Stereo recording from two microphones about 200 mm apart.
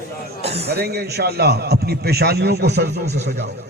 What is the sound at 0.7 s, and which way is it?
A man's voice, 50° right (ahead or behind).